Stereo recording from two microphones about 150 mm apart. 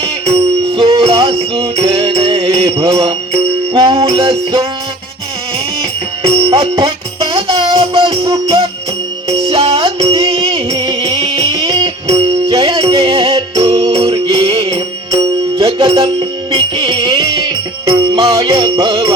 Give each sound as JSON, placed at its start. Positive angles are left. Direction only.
{"t": 0.0, "sound": "music", "side_deg": -35}
{"t": 6.5, "sound": "music", "side_deg": -25}
{"t": 13.6, "sound": "jingle bell", "side_deg": -35}
{"t": 14.4, "sound": "music", "side_deg": -20}